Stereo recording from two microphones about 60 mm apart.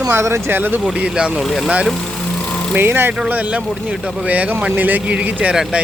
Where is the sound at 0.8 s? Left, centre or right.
Centre.